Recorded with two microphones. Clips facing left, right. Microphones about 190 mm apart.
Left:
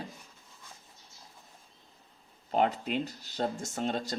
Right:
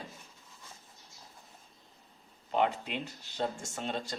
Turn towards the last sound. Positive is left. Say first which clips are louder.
# left 4 dB
turn(degrees=40)  # may be behind; listen again after turning